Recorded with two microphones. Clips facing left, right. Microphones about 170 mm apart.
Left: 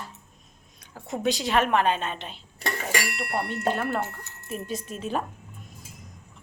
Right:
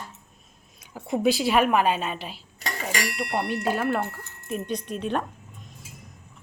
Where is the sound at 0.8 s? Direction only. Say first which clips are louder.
Right 6 dB; 5° right (ahead or behind).